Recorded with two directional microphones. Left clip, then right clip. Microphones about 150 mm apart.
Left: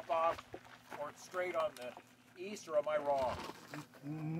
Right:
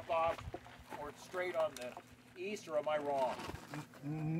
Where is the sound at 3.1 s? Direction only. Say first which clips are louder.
Even; 20° right (ahead or behind).